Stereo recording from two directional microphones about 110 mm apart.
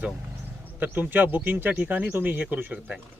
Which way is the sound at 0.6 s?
15° right (ahead or behind).